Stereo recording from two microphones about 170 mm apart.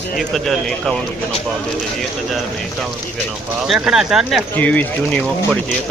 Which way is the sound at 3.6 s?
Centre (ahead or behind).